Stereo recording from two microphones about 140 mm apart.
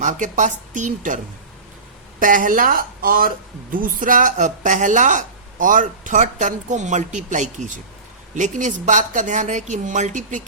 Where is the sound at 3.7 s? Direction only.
75° right (ahead or behind).